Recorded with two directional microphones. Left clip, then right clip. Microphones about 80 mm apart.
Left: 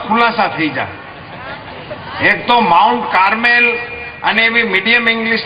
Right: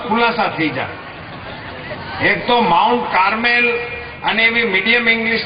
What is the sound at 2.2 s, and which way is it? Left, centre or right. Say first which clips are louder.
A man's voice: left 3 dB; left.